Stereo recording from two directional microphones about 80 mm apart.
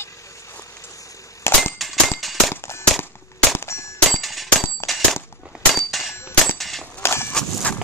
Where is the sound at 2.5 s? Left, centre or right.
Left.